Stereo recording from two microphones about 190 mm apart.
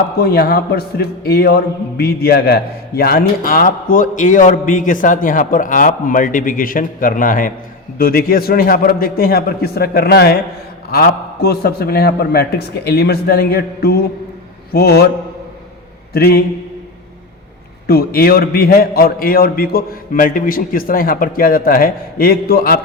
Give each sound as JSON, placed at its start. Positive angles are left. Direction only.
{"t": 0.2, "sound": "a man's voice", "side_deg": 55}
{"t": 16.1, "sound": "a man's voice", "side_deg": 55}
{"t": 17.8, "sound": "a man's voice", "side_deg": 55}